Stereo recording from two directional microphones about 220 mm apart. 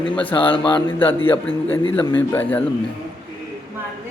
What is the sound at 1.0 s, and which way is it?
A man's voice, 10° left (ahead or behind).